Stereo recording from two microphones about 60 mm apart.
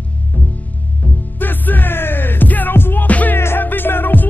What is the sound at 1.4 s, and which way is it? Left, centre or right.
Music, left.